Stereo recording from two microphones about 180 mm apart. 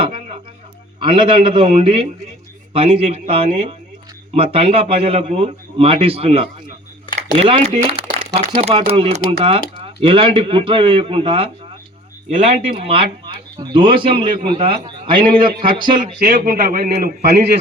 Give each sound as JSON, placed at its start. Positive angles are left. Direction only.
{"t": 0.0, "sound": "a sound", "side_deg": -30}
{"t": 0.9, "sound": "a man's voice", "side_deg": -30}
{"t": 16.2, "sound": "a man's voice", "side_deg": -55}